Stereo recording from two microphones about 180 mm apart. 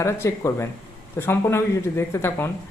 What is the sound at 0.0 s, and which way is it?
Speech, 15° left (ahead or behind).